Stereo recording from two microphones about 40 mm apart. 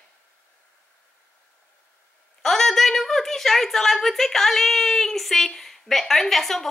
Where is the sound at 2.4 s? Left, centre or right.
Centre.